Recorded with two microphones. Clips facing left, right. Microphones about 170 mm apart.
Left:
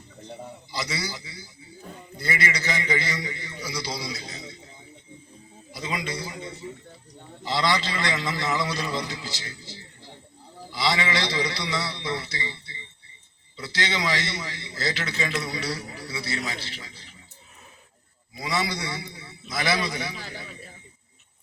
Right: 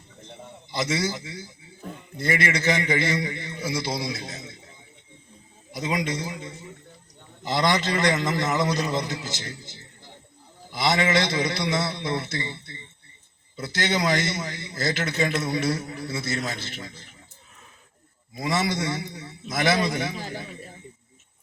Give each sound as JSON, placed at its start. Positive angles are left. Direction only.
{"t": 0.7, "sound": "a man's voice", "side_deg": -50}
{"t": 7.4, "sound": "a man's voice", "side_deg": -45}
{"t": 10.7, "sound": "a man's voice", "side_deg": -50}
{"t": 18.3, "sound": "a man's voice", "side_deg": -50}